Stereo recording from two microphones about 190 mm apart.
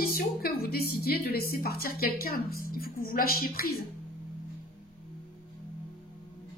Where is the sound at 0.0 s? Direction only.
50° left (ahead or behind).